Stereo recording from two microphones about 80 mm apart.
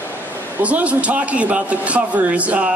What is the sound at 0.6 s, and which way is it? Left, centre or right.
Speech, centre.